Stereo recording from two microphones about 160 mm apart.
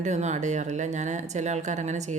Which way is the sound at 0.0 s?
45° right (ahead or behind).